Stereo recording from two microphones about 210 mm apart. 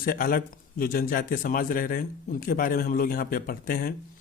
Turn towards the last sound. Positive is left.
turn(degrees=45)  # may be behind; listen again after turning